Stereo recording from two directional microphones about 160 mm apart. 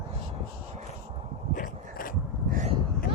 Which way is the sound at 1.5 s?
55° left (ahead or behind).